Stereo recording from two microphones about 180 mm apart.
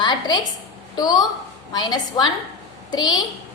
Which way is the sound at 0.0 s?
25° left (ahead or behind).